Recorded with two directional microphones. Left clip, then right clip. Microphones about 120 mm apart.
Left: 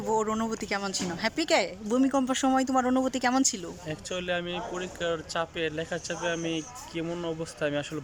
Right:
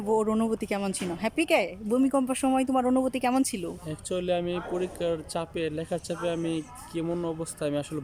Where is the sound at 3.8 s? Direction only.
35° right (ahead or behind).